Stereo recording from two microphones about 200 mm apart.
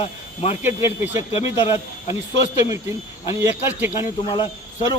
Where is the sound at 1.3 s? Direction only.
30° left (ahead or behind).